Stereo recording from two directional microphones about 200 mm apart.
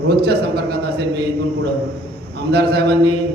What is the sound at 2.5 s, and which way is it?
Speech, 55° right (ahead or behind).